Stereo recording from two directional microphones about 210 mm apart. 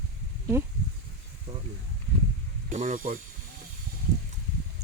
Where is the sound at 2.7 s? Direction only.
35° right (ahead or behind).